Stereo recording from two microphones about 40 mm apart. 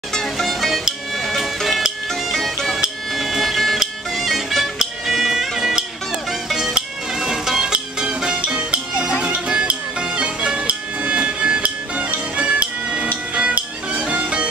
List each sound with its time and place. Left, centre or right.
0.1 s music: centre
7.2 s music: centre
11.6 s music: right